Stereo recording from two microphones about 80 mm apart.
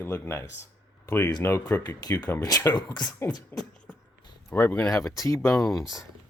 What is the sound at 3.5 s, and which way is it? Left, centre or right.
Speech, left.